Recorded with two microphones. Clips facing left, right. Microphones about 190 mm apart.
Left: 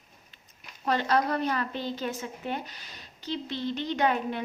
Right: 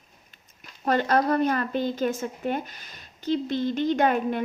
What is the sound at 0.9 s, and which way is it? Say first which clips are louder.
A woman's voice: right 4 dB; 50° right (ahead or behind).